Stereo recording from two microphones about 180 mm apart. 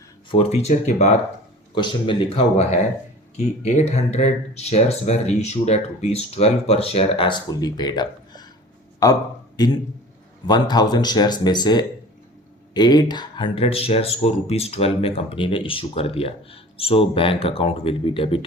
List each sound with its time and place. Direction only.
0.3 s speech: 35° left (ahead or behind)
1.7 s speech: 25° left (ahead or behind)
3.3 s speech: 40° left (ahead or behind); by 8.4 s 25° left (ahead or behind)
9.6 s speech: 20° left (ahead or behind)